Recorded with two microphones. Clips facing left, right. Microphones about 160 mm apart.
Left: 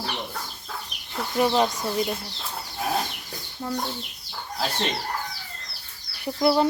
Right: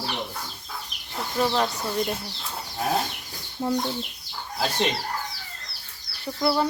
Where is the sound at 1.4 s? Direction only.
15° left (ahead or behind).